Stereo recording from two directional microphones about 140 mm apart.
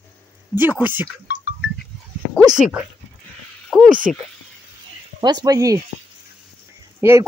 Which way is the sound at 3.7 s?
Centre (ahead or behind).